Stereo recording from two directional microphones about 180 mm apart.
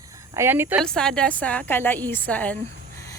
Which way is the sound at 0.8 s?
5° left (ahead or behind).